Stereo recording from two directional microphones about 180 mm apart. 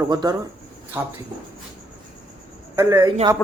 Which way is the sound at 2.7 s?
15° right (ahead or behind).